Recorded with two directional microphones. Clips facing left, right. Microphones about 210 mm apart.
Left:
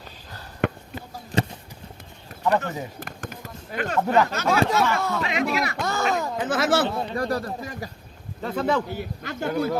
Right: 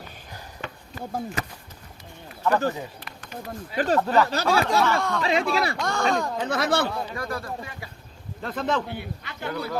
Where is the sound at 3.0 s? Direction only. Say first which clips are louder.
Left 2 dB; 50° left (ahead or behind).